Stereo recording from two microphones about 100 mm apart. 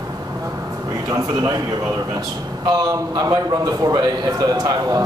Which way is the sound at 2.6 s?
45° right (ahead or behind).